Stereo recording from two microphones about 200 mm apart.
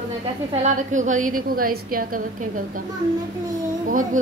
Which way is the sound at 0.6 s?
40° right (ahead or behind).